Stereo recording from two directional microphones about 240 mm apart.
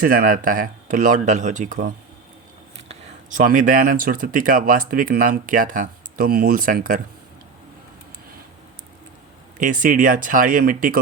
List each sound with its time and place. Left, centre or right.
0.0 s speech: right
2.9 s speech: right
9.6 s speech: right